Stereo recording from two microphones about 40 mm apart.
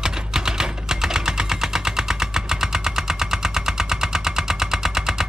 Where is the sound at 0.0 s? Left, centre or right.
Centre.